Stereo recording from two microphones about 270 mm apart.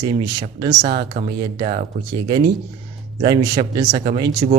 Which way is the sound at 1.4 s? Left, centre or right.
Centre.